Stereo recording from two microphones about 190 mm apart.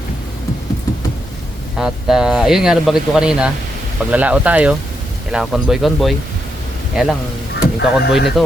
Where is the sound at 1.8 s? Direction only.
5° right (ahead or behind).